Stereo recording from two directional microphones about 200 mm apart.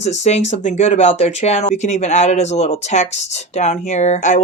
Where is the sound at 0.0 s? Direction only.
35° left (ahead or behind).